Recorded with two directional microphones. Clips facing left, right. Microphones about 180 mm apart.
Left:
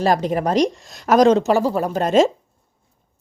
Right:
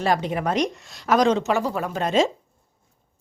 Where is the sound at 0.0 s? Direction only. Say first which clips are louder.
Left 4 dB; 40° left (ahead or behind).